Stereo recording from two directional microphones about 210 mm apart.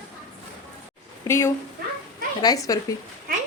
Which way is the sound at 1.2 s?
10° left (ahead or behind).